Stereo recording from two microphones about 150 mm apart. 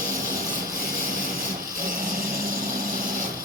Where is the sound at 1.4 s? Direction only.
65° right (ahead or behind).